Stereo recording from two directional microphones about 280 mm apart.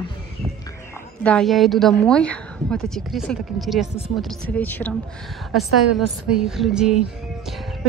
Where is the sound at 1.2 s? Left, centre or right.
Centre.